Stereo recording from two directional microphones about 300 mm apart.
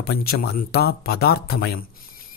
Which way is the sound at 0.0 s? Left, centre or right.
Left.